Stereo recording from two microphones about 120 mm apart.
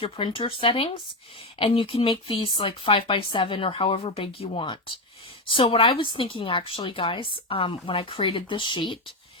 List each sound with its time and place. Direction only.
0.0 s speech: 45° left (ahead or behind)